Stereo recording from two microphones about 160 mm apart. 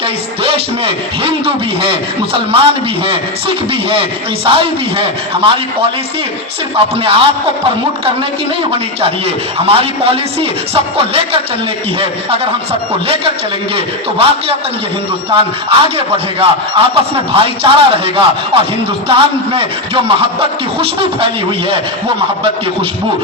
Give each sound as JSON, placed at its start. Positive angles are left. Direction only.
{"t": 0.4, "sound": "a man's voice", "side_deg": -35}
{"t": 6.7, "sound": "a man's voice", "side_deg": -35}
{"t": 9.0, "sound": "a man's voice", "side_deg": -40}
{"t": 13.7, "sound": "a man's voice", "side_deg": -35}